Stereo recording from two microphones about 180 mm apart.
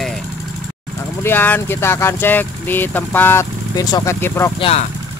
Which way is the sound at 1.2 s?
10° left (ahead or behind).